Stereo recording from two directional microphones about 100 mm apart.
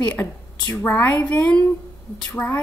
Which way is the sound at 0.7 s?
25° left (ahead or behind).